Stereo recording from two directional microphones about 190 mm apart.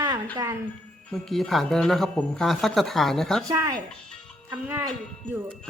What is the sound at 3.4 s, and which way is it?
Speech, 15° right (ahead or behind).